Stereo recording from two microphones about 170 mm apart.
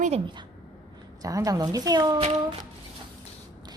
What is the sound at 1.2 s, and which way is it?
A woman's voice, 20° right (ahead or behind).